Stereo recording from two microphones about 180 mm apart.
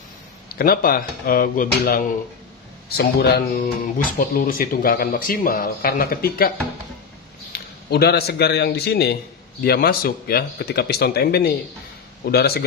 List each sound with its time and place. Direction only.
0.5 s a man's voice: 55° left (ahead or behind)
7.9 s a man's voice: 60° left (ahead or behind)